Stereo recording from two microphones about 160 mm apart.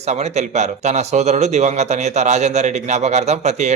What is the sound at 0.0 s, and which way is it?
Speech, 45° right (ahead or behind).